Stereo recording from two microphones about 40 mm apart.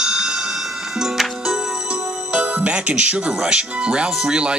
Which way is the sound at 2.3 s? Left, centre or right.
Right.